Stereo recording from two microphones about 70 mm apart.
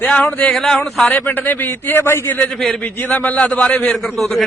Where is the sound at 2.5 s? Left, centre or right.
Centre.